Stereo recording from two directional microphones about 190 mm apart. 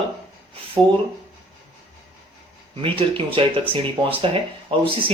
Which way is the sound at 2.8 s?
30° right (ahead or behind).